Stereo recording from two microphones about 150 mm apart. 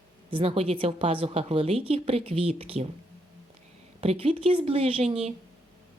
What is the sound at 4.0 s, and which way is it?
Speech, 40° right (ahead or behind).